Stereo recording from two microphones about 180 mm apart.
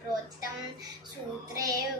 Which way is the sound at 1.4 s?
20° right (ahead or behind).